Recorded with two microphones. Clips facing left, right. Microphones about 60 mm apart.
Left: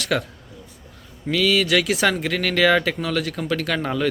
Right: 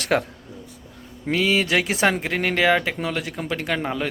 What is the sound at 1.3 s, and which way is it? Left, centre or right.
Speech, right.